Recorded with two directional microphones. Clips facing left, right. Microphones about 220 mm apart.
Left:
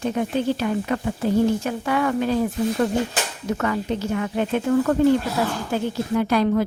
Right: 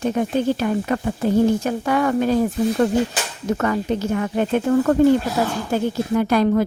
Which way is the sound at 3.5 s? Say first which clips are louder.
Right 3 dB; 45° right (ahead or behind).